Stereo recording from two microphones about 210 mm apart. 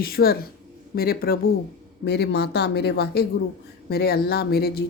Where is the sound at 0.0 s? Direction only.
45° left (ahead or behind).